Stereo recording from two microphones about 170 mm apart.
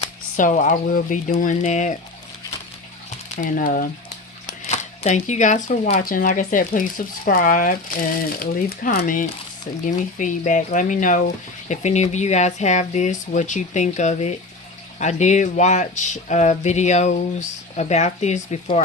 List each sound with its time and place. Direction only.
0.3 s speech: 50° left (ahead or behind)
3.3 s speech: 50° left (ahead or behind)
4.6 s speech: 40° left (ahead or behind)